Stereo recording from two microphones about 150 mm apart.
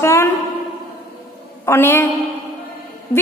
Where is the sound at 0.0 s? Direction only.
20° left (ahead or behind).